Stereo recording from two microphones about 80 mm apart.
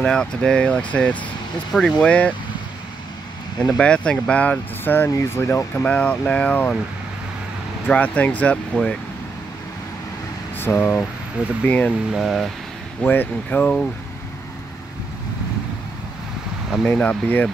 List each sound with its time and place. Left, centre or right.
0.0 s speech: centre
1.7 s speech: centre
2.0 s speech: centre
3.6 s speech: centre; by 5.9 s left
5.9 s speech: centre
7.9 s speech: centre
10.6 s speech: left
12.1 s speech: centre
13.0 s speech: left
16.8 s speech: centre